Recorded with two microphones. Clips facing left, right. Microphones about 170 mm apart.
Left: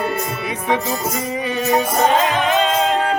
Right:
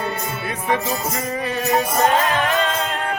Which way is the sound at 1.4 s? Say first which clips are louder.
Left 2 dB; 20° left (ahead or behind).